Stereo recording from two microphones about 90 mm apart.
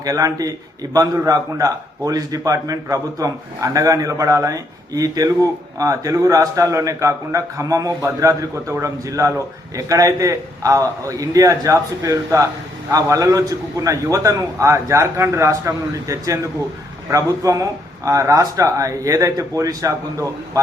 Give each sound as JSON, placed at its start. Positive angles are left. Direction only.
{"t": 0.0, "sound": "a man's voice", "side_deg": -40}